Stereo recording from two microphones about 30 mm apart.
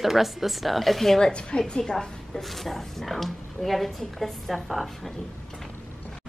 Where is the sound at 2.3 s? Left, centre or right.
Centre.